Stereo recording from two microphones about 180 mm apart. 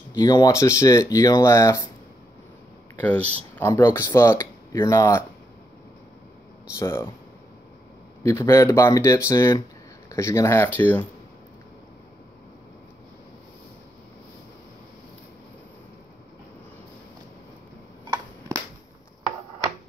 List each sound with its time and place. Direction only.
0.2 s speech: 20° left (ahead or behind)
3.0 s speech: 10° left (ahead or behind)
6.8 s speech: 15° left (ahead or behind)
8.2 s speech: 15° left (ahead or behind)